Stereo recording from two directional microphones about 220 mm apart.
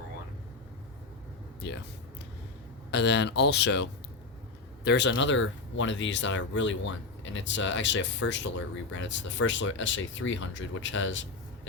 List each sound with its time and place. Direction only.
2.9 s speech: 50° left (ahead or behind)